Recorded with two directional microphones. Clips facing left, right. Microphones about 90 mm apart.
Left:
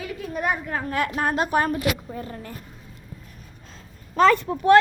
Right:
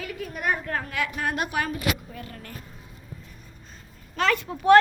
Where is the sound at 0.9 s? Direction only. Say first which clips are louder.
Left 5 dB; 45° left (ahead or behind).